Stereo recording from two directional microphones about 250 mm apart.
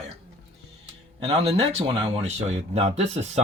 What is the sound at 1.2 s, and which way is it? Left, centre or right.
Speech, right.